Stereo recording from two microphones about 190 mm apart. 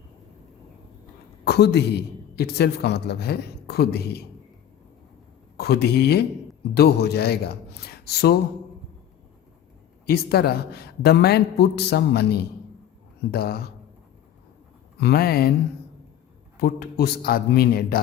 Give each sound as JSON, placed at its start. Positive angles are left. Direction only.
{"t": 1.5, "sound": "a man's voice", "side_deg": 60}
{"t": 5.5, "sound": "a man's voice", "side_deg": 60}
{"t": 10.1, "sound": "a man's voice", "side_deg": 55}
{"t": 15.0, "sound": "speech", "side_deg": 55}
{"t": 16.6, "sound": "a man's voice", "side_deg": 55}